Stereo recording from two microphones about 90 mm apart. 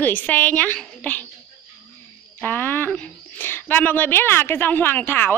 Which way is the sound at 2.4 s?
20° left (ahead or behind).